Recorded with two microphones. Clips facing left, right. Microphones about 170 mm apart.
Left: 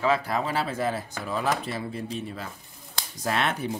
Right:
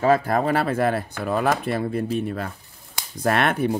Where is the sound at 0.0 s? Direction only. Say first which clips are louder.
Right 6 dB; 50° right (ahead or behind).